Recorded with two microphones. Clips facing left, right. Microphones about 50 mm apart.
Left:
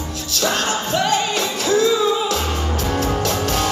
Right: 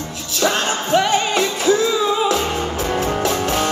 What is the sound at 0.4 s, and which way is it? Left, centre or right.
Music, centre.